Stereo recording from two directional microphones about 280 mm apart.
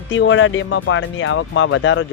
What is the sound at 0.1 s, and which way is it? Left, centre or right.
Speech, left.